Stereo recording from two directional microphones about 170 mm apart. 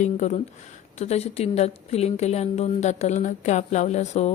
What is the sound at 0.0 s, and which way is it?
A woman's voice, 45° left (ahead or behind).